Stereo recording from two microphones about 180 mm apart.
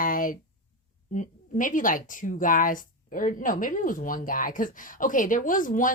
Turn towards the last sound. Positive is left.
turn(degrees=45)  # may be behind; listen again after turning